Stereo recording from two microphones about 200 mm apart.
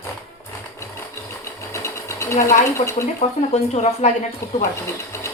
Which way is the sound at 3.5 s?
35° left (ahead or behind).